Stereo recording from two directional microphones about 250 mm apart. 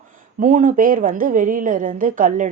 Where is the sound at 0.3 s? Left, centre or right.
Right.